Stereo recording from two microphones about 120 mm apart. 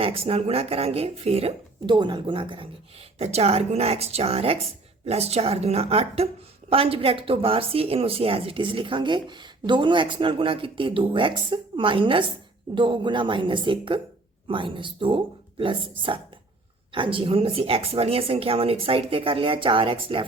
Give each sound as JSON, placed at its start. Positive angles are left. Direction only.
{"t": 0.0, "sound": "speech", "side_deg": -50}
{"t": 2.0, "sound": "speech", "side_deg": -40}
{"t": 3.2, "sound": "speech", "side_deg": -60}